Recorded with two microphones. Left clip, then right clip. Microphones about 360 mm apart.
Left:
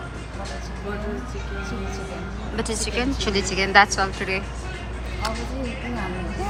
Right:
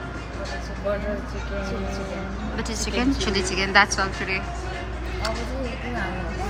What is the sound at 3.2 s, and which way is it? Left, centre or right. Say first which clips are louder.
Speech: left 1 dB; centre.